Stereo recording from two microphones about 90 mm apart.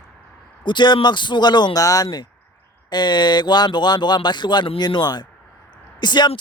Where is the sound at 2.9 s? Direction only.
55° left (ahead or behind).